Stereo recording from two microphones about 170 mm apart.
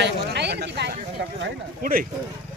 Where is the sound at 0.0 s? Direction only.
90° right.